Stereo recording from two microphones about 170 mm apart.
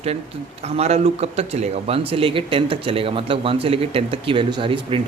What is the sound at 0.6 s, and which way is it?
Speech, 40° right (ahead or behind).